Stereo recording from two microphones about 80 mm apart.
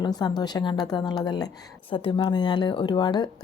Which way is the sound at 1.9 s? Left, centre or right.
Left.